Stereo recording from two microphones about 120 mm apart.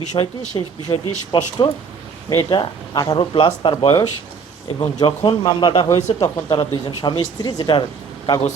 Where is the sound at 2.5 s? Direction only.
40° left (ahead or behind).